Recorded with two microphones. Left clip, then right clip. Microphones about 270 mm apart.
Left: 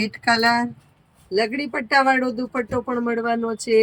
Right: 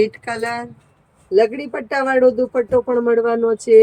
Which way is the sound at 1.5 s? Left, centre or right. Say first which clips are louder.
Left 2 dB; left.